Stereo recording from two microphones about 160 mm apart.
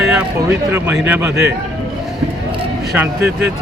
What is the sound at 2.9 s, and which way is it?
Speech, 10° right (ahead or behind).